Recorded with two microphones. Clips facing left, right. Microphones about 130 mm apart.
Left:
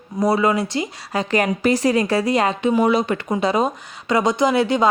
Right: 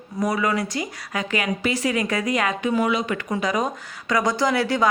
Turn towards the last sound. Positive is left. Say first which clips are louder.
# left 4 dB
turn(degrees=20)  # may be behind; listen again after turning